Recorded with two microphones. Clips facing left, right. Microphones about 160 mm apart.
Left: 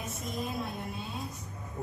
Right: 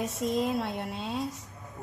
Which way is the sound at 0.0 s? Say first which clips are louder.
Right 8 dB; 80° right.